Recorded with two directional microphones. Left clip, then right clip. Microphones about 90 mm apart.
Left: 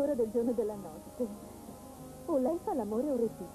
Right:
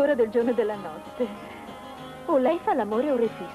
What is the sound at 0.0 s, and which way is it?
Speech, 20° left (ahead or behind).